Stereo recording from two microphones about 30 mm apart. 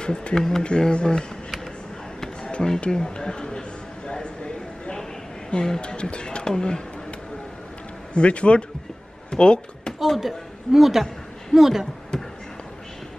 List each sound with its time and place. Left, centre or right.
0.0 s speech: left
0.4 s speech: centre
0.7 s speech: left
2.9 s speech: left
4.1 s a sound: left
5.5 s speech: left
6.4 s speech: left
8.1 s speech: left
9.3 s a sound: left
9.9 s a woman's voice: centre
12.1 s a sound: left